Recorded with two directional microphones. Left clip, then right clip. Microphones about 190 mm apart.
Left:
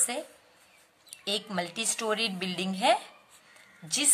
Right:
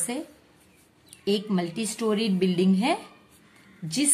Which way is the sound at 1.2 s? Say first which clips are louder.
Right 4 dB; 35° left (ahead or behind).